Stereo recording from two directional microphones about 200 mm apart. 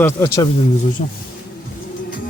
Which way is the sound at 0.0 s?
15° left (ahead or behind).